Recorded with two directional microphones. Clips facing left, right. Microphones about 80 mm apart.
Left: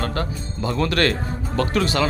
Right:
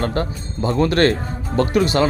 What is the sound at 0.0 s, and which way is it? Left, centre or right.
Speech, right.